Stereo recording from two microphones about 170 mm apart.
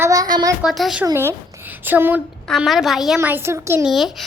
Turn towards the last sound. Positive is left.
turn(degrees=0)  # may be behind; listen again after turning